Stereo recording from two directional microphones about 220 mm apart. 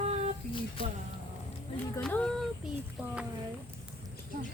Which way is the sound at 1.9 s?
5° left (ahead or behind).